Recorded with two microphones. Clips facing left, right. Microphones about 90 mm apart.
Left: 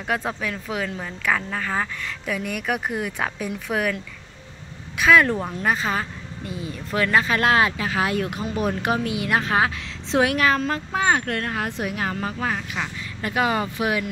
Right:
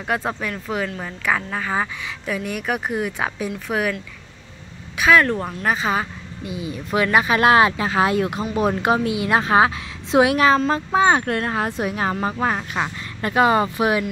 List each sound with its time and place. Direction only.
0.1 s speech: centre (ahead or behind)
4.9 s a woman's voice: centre (ahead or behind); by 14.0 s 25° right (ahead or behind)